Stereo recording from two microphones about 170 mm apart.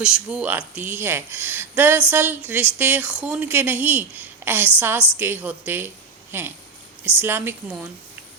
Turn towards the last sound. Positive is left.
turn(degrees=-15)  # may be behind; listen again after turning